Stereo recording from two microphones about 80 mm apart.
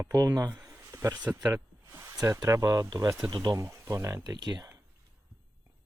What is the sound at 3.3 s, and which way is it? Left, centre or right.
Speech, right.